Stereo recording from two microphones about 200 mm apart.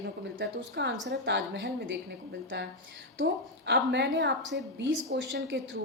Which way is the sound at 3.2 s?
60° right (ahead or behind).